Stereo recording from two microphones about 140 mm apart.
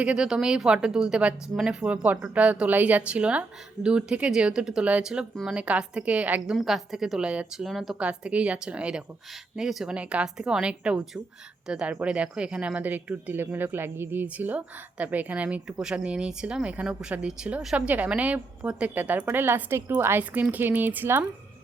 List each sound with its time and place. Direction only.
0.0 s speech: 5° right (ahead or behind)